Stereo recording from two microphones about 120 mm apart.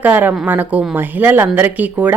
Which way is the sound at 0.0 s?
15° right (ahead or behind).